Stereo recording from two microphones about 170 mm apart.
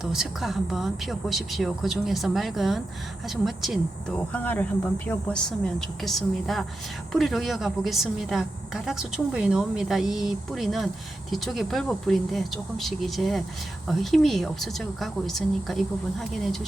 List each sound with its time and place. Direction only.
0.0 s a woman's voice: centre (ahead or behind)